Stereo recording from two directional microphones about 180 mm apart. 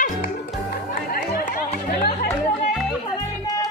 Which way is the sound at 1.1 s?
55° left (ahead or behind).